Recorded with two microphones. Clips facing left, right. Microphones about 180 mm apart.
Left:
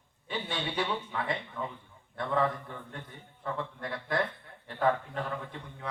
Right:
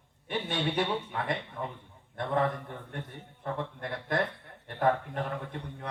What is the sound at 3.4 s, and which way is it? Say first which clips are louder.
Speech: right 1 dB; 20° right (ahead or behind).